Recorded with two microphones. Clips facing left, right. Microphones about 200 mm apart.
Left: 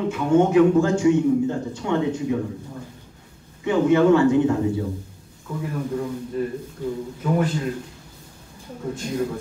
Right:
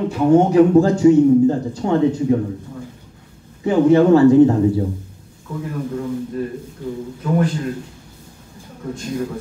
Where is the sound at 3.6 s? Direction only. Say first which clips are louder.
Right 4 dB; 35° right (ahead or behind).